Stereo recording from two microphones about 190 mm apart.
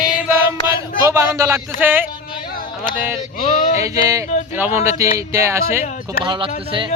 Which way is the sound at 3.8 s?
15° right (ahead or behind).